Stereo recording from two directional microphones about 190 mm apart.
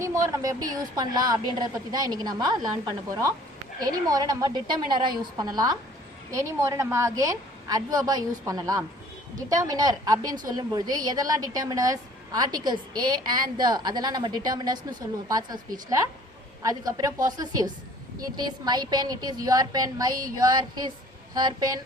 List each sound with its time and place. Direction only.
0.0 s a woman's voice: 15° right (ahead or behind)
3.8 s a woman's voice: 20° right (ahead or behind)